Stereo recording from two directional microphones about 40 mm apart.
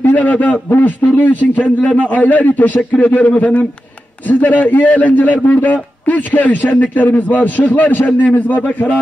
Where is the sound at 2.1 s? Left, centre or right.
Left.